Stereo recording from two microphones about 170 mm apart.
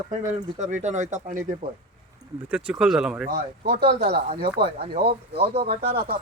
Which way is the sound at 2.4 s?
5° right (ahead or behind).